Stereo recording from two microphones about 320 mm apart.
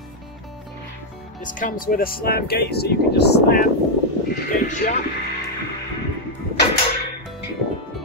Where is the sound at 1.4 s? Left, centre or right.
Left.